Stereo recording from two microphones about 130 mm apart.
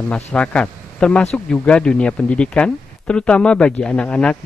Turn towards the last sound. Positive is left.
turn(degrees=10)  # may be behind; listen again after turning